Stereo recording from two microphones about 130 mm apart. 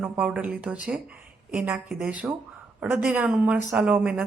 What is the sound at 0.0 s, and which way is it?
A woman's voice, 10° right (ahead or behind).